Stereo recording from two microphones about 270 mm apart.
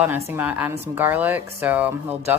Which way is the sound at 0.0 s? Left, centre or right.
Centre.